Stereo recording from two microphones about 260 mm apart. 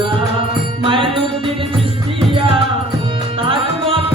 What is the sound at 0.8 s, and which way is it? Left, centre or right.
Music, centre.